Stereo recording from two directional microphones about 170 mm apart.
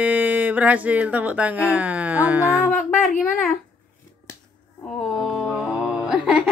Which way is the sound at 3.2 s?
Centre (ahead or behind).